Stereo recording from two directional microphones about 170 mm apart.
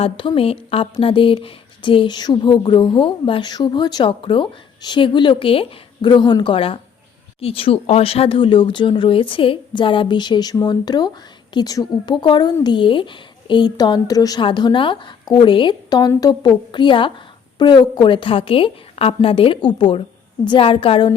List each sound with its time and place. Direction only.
0.0 s a woman's voice: 30° left (ahead or behind)